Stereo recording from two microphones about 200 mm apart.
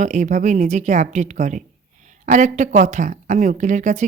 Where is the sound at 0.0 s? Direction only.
35° right (ahead or behind).